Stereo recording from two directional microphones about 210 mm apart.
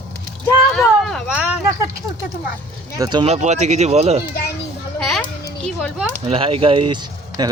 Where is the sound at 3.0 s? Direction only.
20° right (ahead or behind).